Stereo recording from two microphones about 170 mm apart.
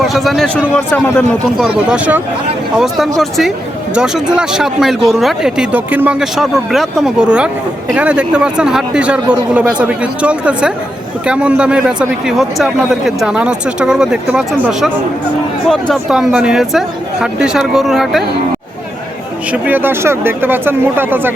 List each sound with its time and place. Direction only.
0.0 s a man's voice: centre (ahead or behind)
19.5 s a man's voice: 10° right (ahead or behind)